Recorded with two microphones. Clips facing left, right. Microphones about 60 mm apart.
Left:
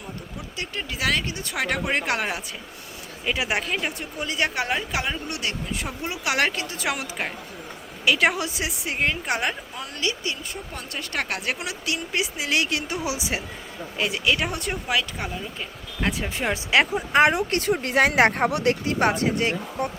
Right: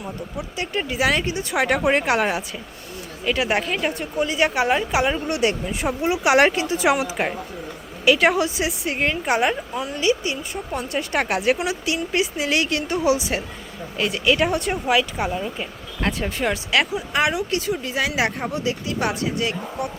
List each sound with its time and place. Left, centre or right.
0.5 s speech: centre
3.2 s a woman's voice: centre
5.1 s a woman's voice: right; by 13.4 s centre
14.3 s a woman's voice: centre
15.3 s speech: right
16.0 s a woman's voice: centre
16.9 s speech: left
18.5 s speech: left
18.9 s speech: left